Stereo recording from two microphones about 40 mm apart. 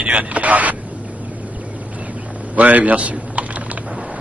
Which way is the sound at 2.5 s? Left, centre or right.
Right.